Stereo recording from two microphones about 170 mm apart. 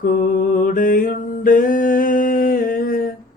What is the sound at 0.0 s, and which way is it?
Mantra, 55° left (ahead or behind).